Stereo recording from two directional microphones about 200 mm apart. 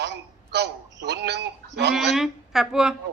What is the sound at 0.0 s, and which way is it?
Telephone, 55° right (ahead or behind).